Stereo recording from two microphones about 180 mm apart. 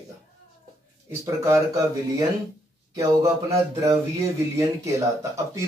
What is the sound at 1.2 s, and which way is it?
Speech, 15° right (ahead or behind).